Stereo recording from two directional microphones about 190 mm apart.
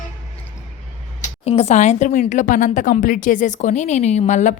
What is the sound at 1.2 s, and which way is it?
A woman's voice, 35° left (ahead or behind).